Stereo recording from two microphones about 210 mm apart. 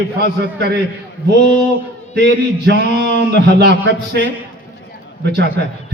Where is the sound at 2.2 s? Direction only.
50° right (ahead or behind).